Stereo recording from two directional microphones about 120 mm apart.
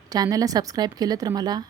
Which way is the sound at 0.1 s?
30° right (ahead or behind).